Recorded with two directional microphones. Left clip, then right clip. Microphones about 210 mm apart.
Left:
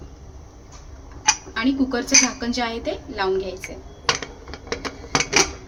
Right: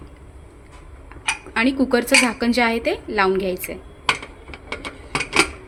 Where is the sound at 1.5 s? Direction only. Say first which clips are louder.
Right 4 dB; 40° right (ahead or behind).